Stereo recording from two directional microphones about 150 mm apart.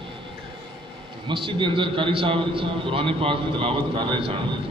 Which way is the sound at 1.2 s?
35° right (ahead or behind).